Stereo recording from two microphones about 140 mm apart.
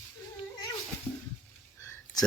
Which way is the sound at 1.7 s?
25° left (ahead or behind).